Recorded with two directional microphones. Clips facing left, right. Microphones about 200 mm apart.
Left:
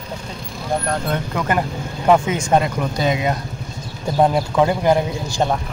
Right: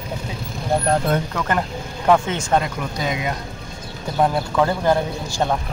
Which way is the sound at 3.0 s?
30° left (ahead or behind).